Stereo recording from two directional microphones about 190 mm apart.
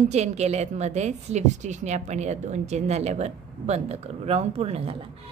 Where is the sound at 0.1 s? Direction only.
35° right (ahead or behind).